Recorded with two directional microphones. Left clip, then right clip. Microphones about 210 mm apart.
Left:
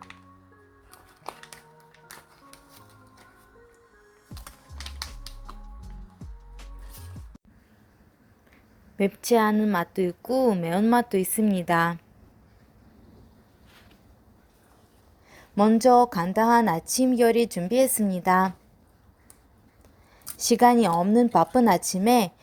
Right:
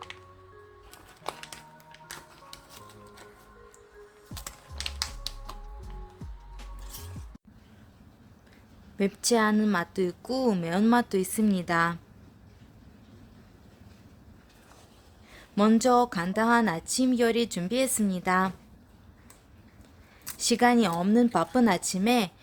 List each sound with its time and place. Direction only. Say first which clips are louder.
0.9 s music: right 2 dB; 10° right (ahead or behind)
4.9 s music: right 4 dB; 15° right (ahead or behind)
5.8 s music: right 3 dB; centre (ahead or behind)
9.0 s a woman's voice: left 3 dB; 10° left (ahead or behind)
15.3 s a woman's voice: left 3 dB; 5° left (ahead or behind)
20.4 s a woman's voice: left 4 dB; 15° left (ahead or behind)